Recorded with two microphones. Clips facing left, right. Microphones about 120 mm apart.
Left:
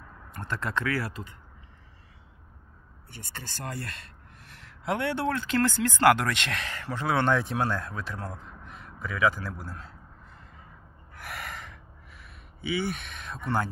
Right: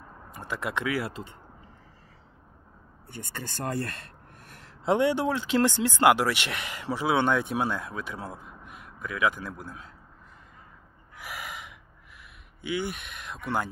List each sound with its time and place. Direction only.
0.0 s a sound: 20° right (ahead or behind)
0.3 s speech: 10° right (ahead or behind)
1.1 s speech: 30° right (ahead or behind)
3.1 s a sound: 50° right (ahead or behind)
4.8 s speech: 20° right (ahead or behind); by 9.8 s centre (ahead or behind)
11.1 s gasp: 5° right (ahead or behind)
12.7 s speech: 5° right (ahead or behind)